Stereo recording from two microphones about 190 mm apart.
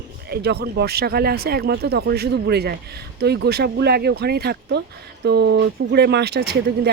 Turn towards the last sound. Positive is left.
turn(degrees=-60)  # may be behind; listen again after turning